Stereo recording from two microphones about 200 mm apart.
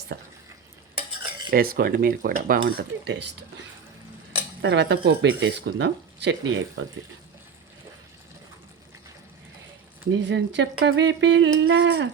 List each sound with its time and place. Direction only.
0.1 s speech: 60° right (ahead or behind)
1.5 s speech: 45° right (ahead or behind)
4.6 s speech: 60° right (ahead or behind)
10.1 s speech: 65° right (ahead or behind)